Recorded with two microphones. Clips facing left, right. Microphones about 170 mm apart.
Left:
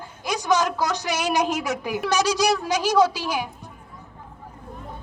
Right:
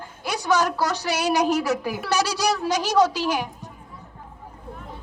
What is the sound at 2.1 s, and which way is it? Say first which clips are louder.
A woman's voice: left 2 dB; 15° left (ahead or behind).